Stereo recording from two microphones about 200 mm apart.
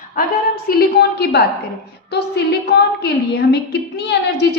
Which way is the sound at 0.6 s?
50° left (ahead or behind).